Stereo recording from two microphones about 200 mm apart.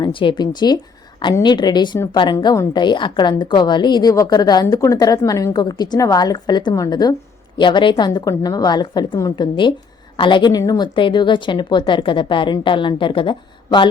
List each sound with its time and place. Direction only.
0.0 s a woman's voice: 25° left (ahead or behind)